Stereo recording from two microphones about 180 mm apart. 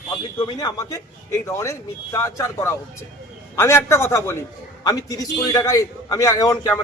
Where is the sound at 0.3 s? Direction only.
25° left (ahead or behind).